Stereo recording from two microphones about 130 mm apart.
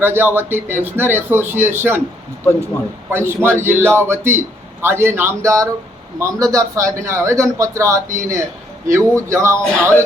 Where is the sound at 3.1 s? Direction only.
20° right (ahead or behind).